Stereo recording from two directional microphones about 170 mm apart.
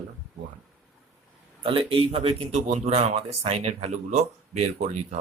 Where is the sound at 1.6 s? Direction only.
35° right (ahead or behind).